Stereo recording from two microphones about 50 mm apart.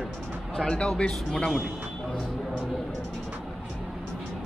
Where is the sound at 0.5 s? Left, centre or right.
Centre.